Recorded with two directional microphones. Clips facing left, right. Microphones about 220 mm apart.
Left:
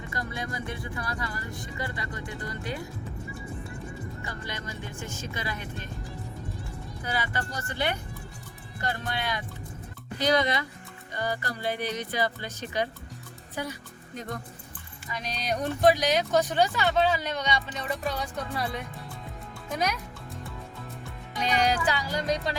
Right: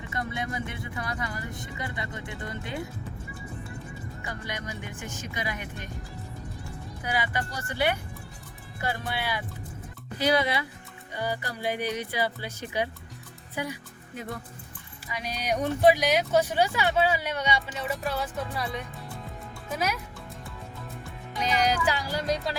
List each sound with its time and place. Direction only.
0.1 s speech: 25° right (ahead or behind)
4.4 s speech: 15° right (ahead or behind)
7.0 s speech: 15° right (ahead or behind)
15.0 s speech: 10° right (ahead or behind)
21.4 s speech: 5° right (ahead or behind)